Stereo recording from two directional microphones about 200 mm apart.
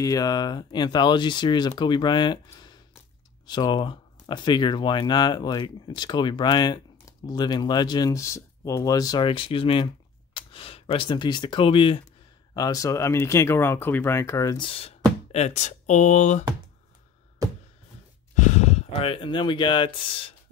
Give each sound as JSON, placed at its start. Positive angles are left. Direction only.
{"t": 0.0, "sound": "speech", "side_deg": 20}
{"t": 17.4, "sound": "a sound", "side_deg": -15}
{"t": 18.3, "sound": "speech", "side_deg": 35}